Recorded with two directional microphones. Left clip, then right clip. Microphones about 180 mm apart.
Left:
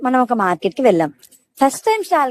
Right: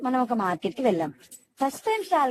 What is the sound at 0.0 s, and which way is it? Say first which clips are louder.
Speech: left 9 dB; 35° left (ahead or behind).